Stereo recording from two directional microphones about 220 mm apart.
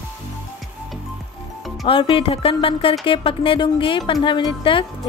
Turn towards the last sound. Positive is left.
turn(degrees=20)  # may be behind; listen again after turning